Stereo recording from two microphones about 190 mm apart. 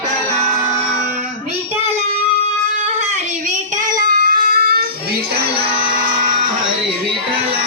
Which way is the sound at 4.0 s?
50° right (ahead or behind).